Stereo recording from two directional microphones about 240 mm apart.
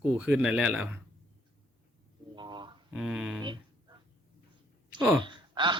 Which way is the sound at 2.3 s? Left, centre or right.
Centre.